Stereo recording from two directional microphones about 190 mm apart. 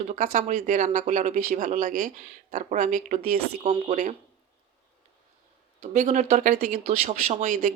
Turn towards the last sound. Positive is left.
turn(degrees=-40)  # may be behind; listen again after turning